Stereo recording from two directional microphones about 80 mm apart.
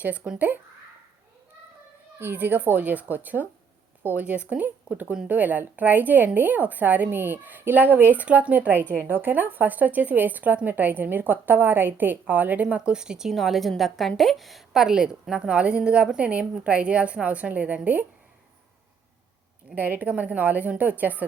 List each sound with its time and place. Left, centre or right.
0.0 s a woman's voice: centre
2.1 s a woman's voice: right
19.7 s a woman's voice: right